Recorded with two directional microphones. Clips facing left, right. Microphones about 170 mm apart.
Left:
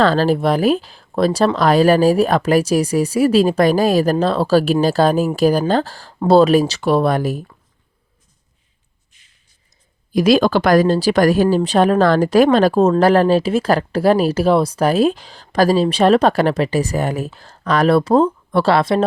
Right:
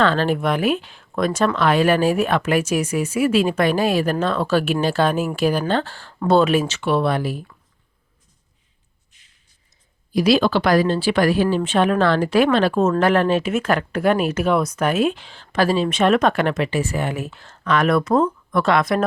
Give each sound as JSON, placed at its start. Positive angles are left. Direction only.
{"t": 0.0, "sound": "speech", "side_deg": 35}
{"t": 10.1, "sound": "speech", "side_deg": 45}